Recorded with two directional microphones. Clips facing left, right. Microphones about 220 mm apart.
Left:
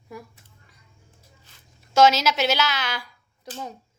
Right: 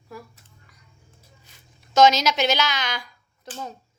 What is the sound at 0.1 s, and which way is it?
Speech, 20° left (ahead or behind).